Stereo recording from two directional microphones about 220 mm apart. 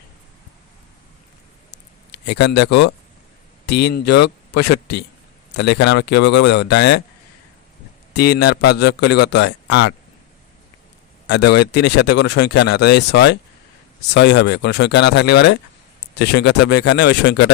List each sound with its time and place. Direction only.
1.7 s a sound: 50° left (ahead or behind)
3.7 s speech: 50° left (ahead or behind)
8.1 s speech: 45° left (ahead or behind)
11.3 s speech: 50° left (ahead or behind)